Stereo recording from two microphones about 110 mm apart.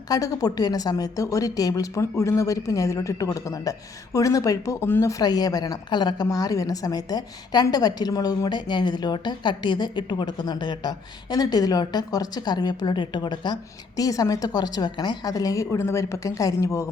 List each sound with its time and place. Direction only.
0.1 s a woman's voice: 35° left (ahead or behind)
5.2 s a woman's voice: 35° left (ahead or behind)